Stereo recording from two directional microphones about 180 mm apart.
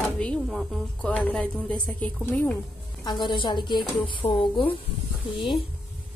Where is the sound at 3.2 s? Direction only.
25° left (ahead or behind).